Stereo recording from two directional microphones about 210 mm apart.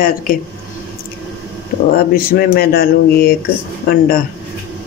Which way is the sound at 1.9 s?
45° left (ahead or behind).